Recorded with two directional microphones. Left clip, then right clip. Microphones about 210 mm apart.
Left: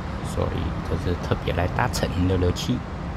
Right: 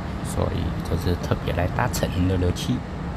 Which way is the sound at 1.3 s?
Centre (ahead or behind).